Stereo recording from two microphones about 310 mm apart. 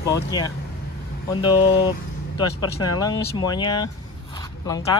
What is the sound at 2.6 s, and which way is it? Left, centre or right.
Speech, centre.